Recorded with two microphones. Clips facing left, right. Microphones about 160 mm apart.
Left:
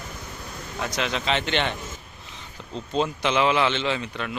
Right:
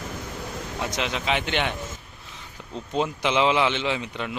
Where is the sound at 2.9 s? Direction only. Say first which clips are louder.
Even; 15° right (ahead or behind).